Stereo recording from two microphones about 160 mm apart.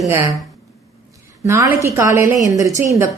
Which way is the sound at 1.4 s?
20° right (ahead or behind).